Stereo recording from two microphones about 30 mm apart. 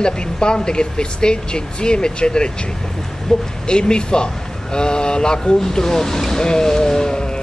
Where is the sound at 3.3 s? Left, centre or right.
Centre.